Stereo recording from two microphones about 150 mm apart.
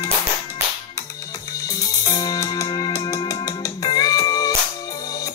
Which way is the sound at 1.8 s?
25° left (ahead or behind).